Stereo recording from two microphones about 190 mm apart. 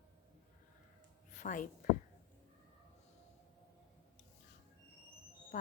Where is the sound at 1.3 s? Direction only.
40° left (ahead or behind).